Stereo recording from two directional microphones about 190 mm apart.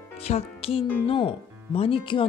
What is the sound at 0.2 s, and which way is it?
Speech, 30° left (ahead or behind).